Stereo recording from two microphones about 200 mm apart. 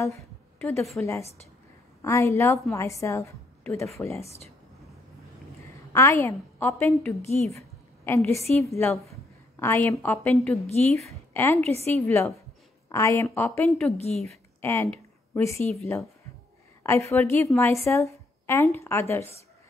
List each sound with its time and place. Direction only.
0.0 s a woman's voice: 10° left (ahead or behind)
4.2 s a woman's voice: 30° left (ahead or behind)
5.6 s a woman's voice: 15° left (ahead or behind)
7.5 s a sound: 15° left (ahead or behind)
8.6 s a woman's voice: 10° left (ahead or behind)
9.1 s a sound: 15° left (ahead or behind)
11.1 s a woman's voice: 10° left (ahead or behind)
11.6 s a woman's voice: 30° right (ahead or behind)
11.9 s a woman's voice: 10° left (ahead or behind)
13.9 s a woman's voice: 35° left (ahead or behind)
14.2 s a woman's voice: 15° left (ahead or behind)